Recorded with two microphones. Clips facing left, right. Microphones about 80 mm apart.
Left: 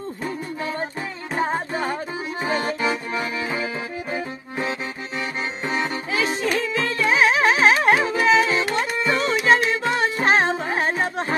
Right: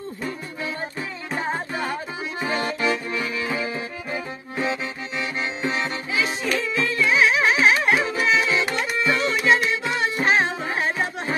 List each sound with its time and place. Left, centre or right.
1.5 s music: left
3.4 s accordion: left
6.1 s music: left